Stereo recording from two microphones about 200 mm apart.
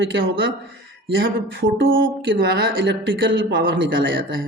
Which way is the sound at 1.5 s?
70° right (ahead or behind).